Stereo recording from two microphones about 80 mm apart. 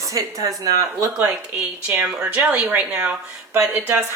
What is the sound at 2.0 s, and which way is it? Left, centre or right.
A woman's voice, centre.